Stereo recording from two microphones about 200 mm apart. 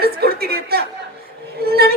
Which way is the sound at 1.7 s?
50° right (ahead or behind).